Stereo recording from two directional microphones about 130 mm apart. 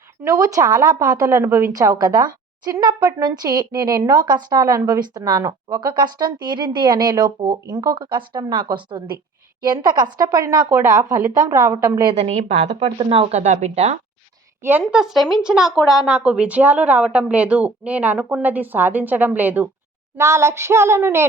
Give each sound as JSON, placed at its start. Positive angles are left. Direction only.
{"t": 0.3, "sound": "a woman's voice", "side_deg": -25}
{"t": 12.1, "sound": "speech", "side_deg": -55}
{"t": 13.0, "sound": "speech", "side_deg": -45}
{"t": 13.4, "sound": "speech", "side_deg": -60}
{"t": 14.6, "sound": "a woman's voice", "side_deg": -15}